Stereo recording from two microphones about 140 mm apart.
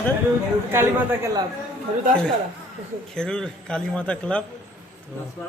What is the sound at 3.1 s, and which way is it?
A man's voice, 5° left (ahead or behind).